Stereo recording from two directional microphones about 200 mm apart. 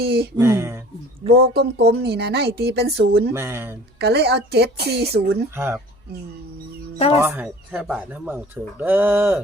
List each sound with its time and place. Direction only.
0.0 s speech: 50° right (ahead or behind)
0.3 s speech: 15° right (ahead or behind)
1.4 s speech: 50° right (ahead or behind)
3.3 s speech: 10° right (ahead or behind)
3.9 s a woman's voice: 55° right (ahead or behind)
5.5 s speech: 10° right (ahead or behind)
7.2 s speech: 10° right (ahead or behind)